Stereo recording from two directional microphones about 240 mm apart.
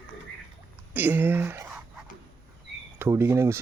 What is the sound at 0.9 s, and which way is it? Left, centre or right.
Speech, centre.